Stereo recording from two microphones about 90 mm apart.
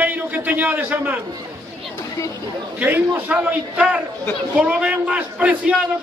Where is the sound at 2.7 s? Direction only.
20° right (ahead or behind).